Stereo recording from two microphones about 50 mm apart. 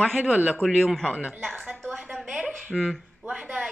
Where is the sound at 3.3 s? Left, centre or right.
Centre.